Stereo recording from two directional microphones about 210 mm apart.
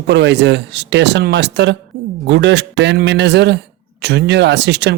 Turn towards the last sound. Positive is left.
turn(degrees=-55)  # may be behind; listen again after turning